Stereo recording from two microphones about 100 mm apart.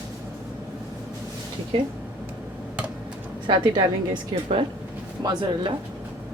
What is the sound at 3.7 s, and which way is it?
A woman's voice, 50° right (ahead or behind).